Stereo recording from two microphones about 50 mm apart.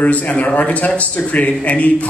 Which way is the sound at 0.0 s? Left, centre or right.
Left.